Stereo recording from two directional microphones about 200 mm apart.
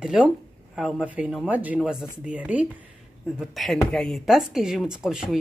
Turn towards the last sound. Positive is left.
turn(degrees=-5)  # may be behind; listen again after turning